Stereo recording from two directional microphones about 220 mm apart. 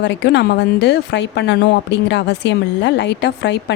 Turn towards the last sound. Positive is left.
turn(degrees=50)  # may be behind; listen again after turning